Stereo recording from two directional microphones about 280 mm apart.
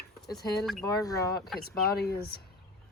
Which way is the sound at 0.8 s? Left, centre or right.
Centre.